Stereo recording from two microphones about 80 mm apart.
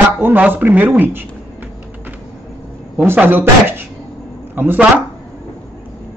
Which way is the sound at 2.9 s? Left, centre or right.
Right.